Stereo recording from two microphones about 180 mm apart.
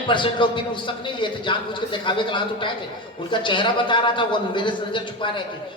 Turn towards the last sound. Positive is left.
turn(degrees=25)  # may be behind; listen again after turning